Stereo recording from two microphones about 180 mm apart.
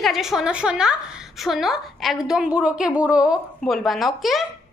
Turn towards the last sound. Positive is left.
turn(degrees=0)  # may be behind; listen again after turning